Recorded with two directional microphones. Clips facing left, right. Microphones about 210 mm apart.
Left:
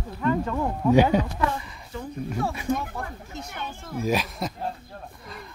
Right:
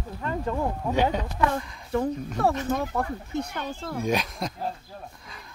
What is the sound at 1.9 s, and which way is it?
Speech, 60° right (ahead or behind).